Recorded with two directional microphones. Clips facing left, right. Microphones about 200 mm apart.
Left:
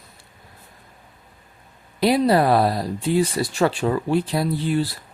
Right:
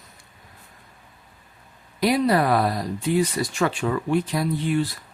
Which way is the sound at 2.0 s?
30° left (ahead or behind).